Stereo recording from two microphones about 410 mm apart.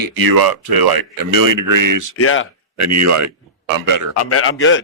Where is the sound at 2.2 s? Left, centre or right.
Left.